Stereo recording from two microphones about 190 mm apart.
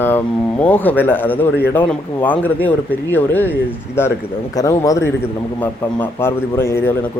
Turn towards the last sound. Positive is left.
turn(degrees=15)  # may be behind; listen again after turning